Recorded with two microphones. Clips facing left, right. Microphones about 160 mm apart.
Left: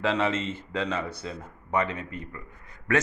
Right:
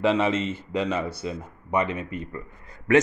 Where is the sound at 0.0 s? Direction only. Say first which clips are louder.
Right 4 dB; 15° right (ahead or behind).